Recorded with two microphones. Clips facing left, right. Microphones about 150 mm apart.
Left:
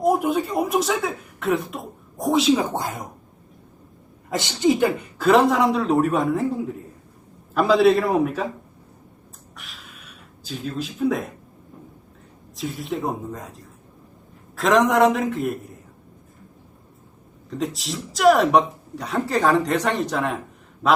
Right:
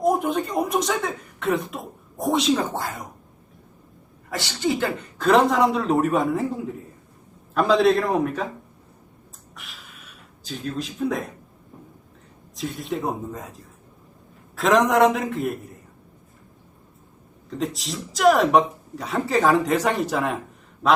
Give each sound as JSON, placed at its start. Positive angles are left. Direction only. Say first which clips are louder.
{"t": 0.0, "sound": "speech", "louder": "left 1 dB", "side_deg": 5}
{"t": 2.7, "sound": "speech", "louder": "left 2 dB", "side_deg": 20}
{"t": 4.3, "sound": "speech", "louder": "left 5 dB", "side_deg": 20}
{"t": 9.6, "sound": "gasp", "louder": "left 1 dB", "side_deg": 0}
{"t": 12.5, "sound": "speech", "louder": "left 1 dB", "side_deg": 0}
{"t": 17.5, "sound": "speech", "louder": "left 1 dB", "side_deg": 0}
{"t": 20.8, "sound": "a sound", "louder": "even", "side_deg": 0}